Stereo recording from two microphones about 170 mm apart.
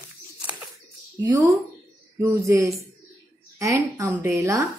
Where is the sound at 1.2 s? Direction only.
20° right (ahead or behind).